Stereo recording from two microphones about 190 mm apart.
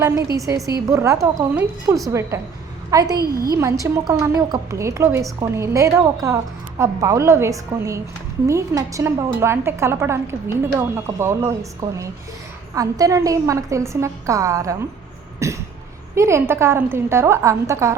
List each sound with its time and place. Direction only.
0.3 s a woman's voice: 15° right (ahead or behind)
3.2 s a woman's voice: 55° right (ahead or behind)
3.5 s a woman's voice: 15° right (ahead or behind)